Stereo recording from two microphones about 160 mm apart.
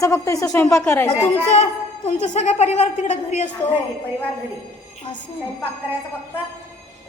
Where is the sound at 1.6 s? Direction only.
45° left (ahead or behind).